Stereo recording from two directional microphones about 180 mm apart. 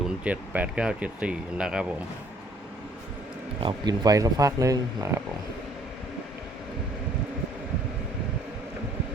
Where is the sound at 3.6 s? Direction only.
20° right (ahead or behind).